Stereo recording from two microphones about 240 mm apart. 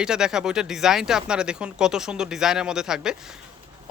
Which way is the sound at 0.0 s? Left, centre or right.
Centre.